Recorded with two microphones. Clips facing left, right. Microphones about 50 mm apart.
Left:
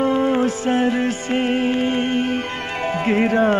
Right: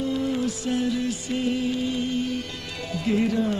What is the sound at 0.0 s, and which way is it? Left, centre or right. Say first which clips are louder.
Music: left 8 dB; left.